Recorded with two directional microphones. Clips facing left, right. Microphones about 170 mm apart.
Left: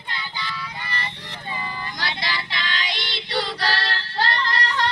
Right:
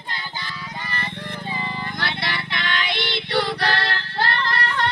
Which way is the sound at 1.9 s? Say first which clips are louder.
Right 1 dB; 55° right (ahead or behind).